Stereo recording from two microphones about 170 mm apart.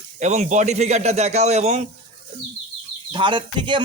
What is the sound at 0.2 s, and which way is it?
Speech, 45° right (ahead or behind).